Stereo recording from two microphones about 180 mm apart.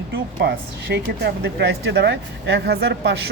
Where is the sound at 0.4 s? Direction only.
65° right (ahead or behind).